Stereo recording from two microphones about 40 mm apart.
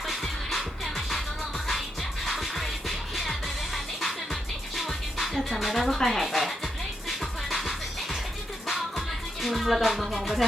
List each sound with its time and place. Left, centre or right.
0.1 s music: centre
2.2 s music: centre
4.8 s music: centre
6.2 s speech: centre
7.2 s music: centre